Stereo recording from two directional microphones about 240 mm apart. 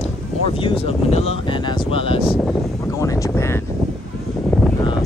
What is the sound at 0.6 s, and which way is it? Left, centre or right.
Speech, left.